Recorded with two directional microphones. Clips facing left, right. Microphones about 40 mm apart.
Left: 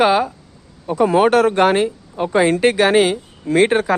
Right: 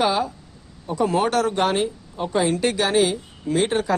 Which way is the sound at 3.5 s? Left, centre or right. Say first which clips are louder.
Left 7 dB; left.